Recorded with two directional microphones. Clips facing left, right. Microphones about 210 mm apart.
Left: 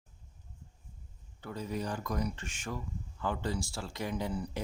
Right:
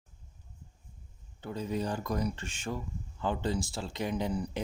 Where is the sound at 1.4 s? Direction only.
25° right (ahead or behind).